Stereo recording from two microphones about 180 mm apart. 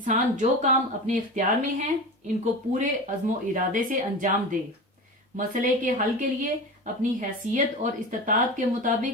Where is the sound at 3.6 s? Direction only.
45° right (ahead or behind).